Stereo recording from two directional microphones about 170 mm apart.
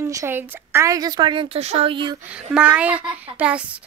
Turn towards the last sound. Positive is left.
turn(degrees=-5)  # may be behind; listen again after turning